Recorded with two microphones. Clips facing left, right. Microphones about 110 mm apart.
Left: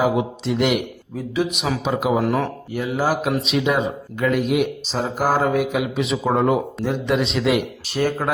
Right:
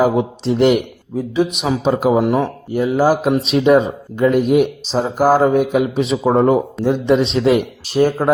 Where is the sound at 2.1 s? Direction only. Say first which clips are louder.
Right 5 dB; 20° right (ahead or behind).